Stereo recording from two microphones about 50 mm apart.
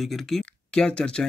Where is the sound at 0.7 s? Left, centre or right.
Centre.